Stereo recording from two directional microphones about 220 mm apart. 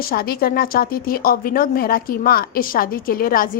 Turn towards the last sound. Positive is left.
turn(degrees=40)  # may be behind; listen again after turning